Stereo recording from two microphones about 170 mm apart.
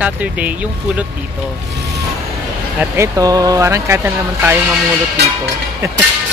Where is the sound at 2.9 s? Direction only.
15° right (ahead or behind).